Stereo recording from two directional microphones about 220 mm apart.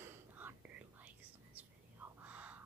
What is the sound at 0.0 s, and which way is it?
Whispering, 10° right (ahead or behind).